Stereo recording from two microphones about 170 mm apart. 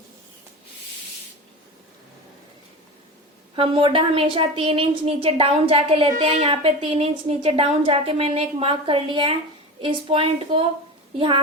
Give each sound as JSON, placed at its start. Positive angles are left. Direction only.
{"t": 3.5, "sound": "a woman's voice", "side_deg": -30}